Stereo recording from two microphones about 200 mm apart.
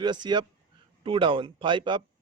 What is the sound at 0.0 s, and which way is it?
Speech, 20° right (ahead or behind).